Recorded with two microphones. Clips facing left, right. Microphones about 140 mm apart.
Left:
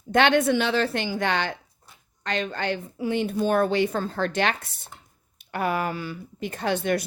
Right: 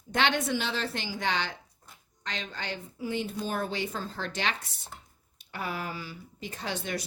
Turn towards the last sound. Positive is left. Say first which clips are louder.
# left 10 dB
turn(degrees=55)  # may be behind; listen again after turning